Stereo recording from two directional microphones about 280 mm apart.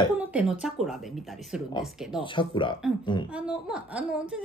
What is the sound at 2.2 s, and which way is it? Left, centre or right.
Speech, centre.